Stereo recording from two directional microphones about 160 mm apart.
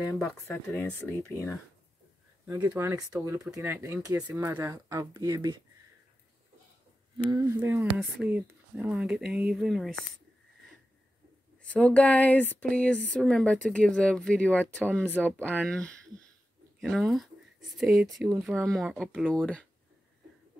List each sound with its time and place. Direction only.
0.1 s speech: 20° left (ahead or behind)
2.4 s speech: 20° right (ahead or behind)
7.2 s speech: 20° right (ahead or behind); by 9.9 s centre (ahead or behind)
11.7 s speech: 10° left (ahead or behind)